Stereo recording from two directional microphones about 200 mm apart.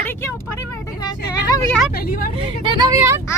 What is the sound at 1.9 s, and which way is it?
Speech, 50° left (ahead or behind).